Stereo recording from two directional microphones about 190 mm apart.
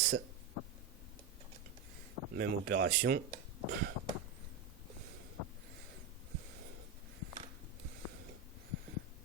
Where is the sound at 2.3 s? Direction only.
50° right (ahead or behind).